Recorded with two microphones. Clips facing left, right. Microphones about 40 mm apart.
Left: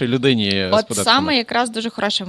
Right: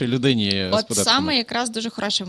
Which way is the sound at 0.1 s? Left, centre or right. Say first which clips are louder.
Left 2 dB; centre.